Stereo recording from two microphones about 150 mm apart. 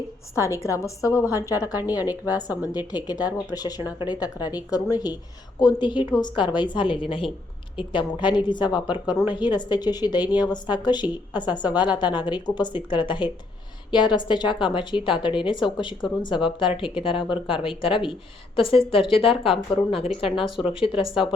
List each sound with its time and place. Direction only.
0.3 s a woman's voice: 20° left (ahead or behind)
1.6 s a woman's voice: 10° right (ahead or behind)
2.7 s a woman's voice: 25° left (ahead or behind)
5.5 s a woman's voice: 30° left (ahead or behind)
20.3 s speech: centre (ahead or behind)
20.7 s a woman's voice: 35° left (ahead or behind)